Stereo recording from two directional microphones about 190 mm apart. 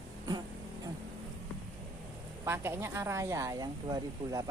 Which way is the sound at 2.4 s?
15° right (ahead or behind).